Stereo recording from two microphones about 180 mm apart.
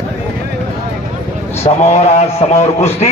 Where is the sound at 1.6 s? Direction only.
35° left (ahead or behind).